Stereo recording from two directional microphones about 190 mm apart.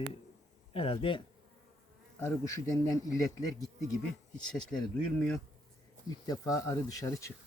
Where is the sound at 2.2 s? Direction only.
15° left (ahead or behind).